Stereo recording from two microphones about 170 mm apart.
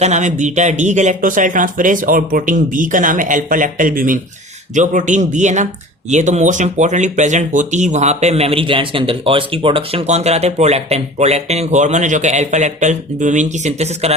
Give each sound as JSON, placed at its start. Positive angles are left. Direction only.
{"t": 0.0, "sound": "speech", "side_deg": -45}